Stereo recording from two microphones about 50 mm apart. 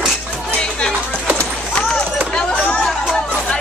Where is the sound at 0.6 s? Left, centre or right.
Centre.